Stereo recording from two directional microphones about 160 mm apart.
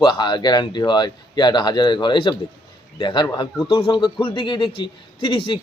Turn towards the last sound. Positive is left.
turn(degrees=30)  # may be behind; listen again after turning